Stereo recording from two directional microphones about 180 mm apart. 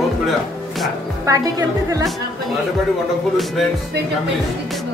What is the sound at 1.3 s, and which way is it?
Speech, 20° right (ahead or behind).